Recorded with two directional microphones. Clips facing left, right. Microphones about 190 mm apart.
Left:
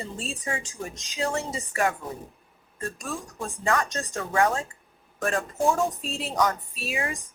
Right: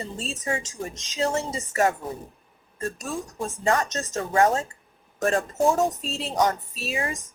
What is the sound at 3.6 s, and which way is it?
Speech, 25° right (ahead or behind).